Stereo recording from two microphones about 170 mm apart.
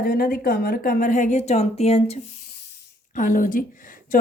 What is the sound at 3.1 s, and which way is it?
A woman's voice, 55° left (ahead or behind).